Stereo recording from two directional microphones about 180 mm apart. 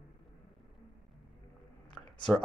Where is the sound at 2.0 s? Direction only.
5° left (ahead or behind).